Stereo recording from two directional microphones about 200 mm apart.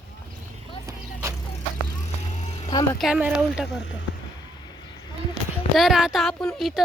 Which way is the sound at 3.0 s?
5° right (ahead or behind).